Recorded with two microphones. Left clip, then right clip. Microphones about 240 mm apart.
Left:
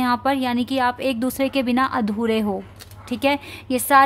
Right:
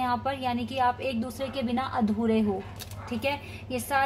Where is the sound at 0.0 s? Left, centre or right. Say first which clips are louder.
Left 7 dB; left.